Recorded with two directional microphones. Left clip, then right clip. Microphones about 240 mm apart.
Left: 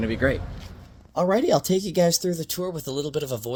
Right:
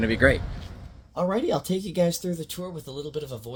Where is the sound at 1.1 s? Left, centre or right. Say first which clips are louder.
Left 5 dB; left.